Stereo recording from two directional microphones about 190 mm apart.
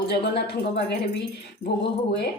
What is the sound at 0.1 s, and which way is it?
A woman's voice, 60° left (ahead or behind).